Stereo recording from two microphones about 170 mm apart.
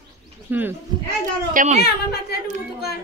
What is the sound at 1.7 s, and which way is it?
Speech, 70° left (ahead or behind).